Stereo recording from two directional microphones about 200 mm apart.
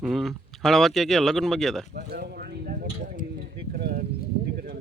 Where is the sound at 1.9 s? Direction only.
50° right (ahead or behind).